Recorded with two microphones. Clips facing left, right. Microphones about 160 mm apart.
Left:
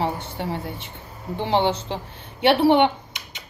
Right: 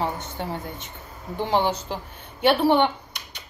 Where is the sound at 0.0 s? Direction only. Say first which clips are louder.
Left 2 dB; 30° left (ahead or behind).